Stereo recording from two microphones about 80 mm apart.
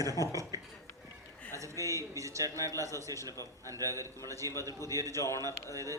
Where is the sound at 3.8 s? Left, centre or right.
Right.